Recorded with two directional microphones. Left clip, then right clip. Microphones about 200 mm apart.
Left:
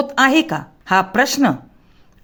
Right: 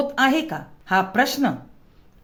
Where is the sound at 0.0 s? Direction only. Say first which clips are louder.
Left 5 dB; 30° left (ahead or behind).